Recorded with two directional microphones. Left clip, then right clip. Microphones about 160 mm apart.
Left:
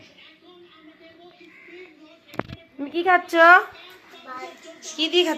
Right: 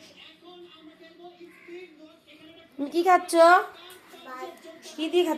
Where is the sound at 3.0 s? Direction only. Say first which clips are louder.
Left 3 dB; 10° right (ahead or behind).